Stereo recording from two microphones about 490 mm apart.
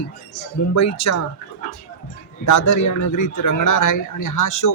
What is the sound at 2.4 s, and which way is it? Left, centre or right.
A man's voice, left.